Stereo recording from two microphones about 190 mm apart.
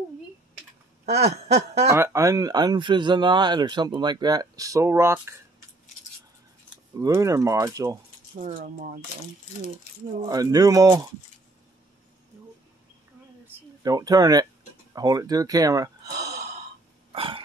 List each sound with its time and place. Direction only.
1.2 s a sound: 35° right (ahead or behind)
1.9 s speech: 15° right (ahead or behind)
7.0 s speech: 15° right (ahead or behind)
8.4 s speech: 40° right (ahead or behind)
10.2 s speech: 20° right (ahead or behind)
13.8 s speech: 20° right (ahead or behind)
16.1 s sigh: 60° right (ahead or behind)
17.1 s a sound: 30° right (ahead or behind)